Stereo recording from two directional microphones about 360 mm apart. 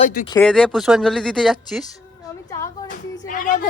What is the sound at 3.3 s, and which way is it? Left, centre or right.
Speech, left.